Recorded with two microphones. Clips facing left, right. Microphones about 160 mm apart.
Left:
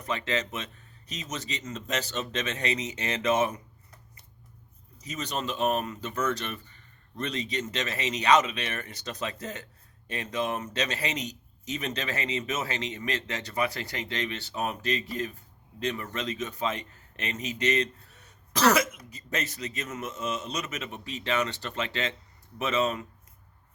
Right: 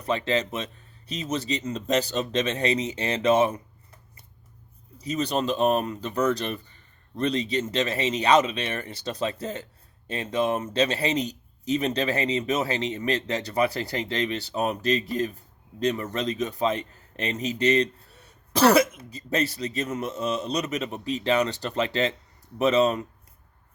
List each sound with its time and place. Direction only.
0.0 s a man's voice: 30° right (ahead or behind)
4.9 s a man's voice: 35° right (ahead or behind)